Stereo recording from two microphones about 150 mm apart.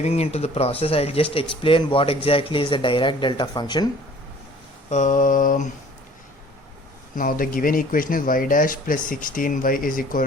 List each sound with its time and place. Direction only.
0.0 s speech: 45° left (ahead or behind); by 3.8 s 30° left (ahead or behind)
4.9 s mantra: 55° left (ahead or behind)
7.2 s speech: 70° left (ahead or behind)